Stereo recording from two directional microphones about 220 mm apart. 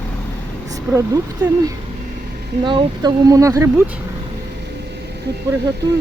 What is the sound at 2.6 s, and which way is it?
Speech, 20° right (ahead or behind).